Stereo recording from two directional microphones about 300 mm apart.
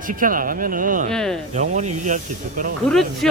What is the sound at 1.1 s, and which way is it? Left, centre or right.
Speech, centre.